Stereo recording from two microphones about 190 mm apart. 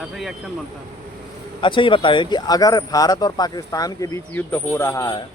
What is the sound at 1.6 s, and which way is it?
Speech, 25° left (ahead or behind).